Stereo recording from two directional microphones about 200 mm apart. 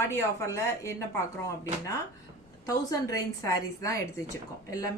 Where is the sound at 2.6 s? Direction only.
15° left (ahead or behind).